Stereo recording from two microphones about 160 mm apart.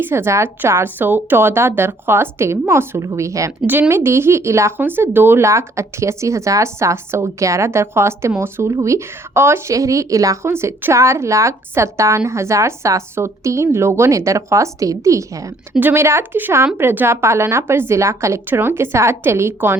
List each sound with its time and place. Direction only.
0.0 s a woman's voice: 15° right (ahead or behind)